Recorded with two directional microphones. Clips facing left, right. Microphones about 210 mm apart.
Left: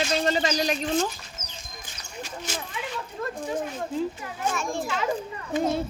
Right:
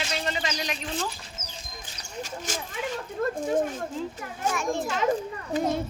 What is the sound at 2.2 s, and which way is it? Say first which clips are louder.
Speech: left 1 dB; 45° right (ahead or behind).